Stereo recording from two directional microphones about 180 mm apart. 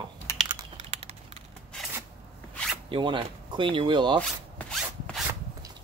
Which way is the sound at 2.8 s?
25° right (ahead or behind).